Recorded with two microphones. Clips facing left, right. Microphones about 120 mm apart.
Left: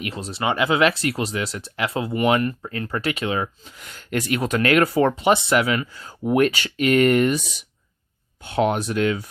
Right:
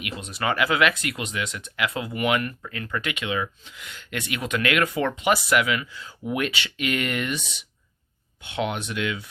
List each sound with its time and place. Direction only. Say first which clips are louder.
0.0 s speech: left 3 dB; 30° left (ahead or behind)